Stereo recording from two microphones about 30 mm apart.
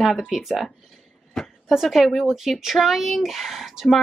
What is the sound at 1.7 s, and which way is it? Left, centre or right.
Speech, centre.